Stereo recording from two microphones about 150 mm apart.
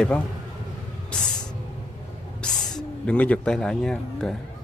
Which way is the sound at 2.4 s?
5° left (ahead or behind).